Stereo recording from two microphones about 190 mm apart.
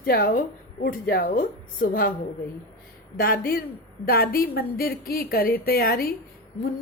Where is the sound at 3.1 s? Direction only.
50° left (ahead or behind).